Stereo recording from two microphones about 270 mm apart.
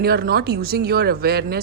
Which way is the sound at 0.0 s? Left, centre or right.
Right.